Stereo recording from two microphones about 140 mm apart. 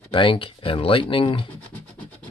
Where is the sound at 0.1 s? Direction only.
35° left (ahead or behind).